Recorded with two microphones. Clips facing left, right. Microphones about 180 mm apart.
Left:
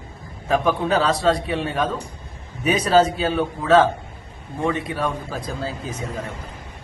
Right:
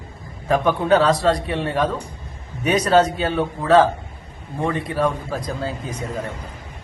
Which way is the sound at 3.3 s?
Centre (ahead or behind).